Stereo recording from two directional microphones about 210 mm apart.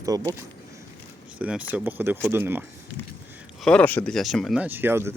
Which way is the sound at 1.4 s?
5° right (ahead or behind).